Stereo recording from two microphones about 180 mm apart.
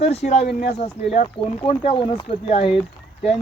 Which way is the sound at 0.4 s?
65° left (ahead or behind).